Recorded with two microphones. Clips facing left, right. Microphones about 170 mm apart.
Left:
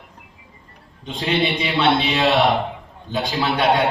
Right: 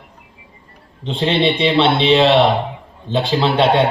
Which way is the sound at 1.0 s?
30° right (ahead or behind).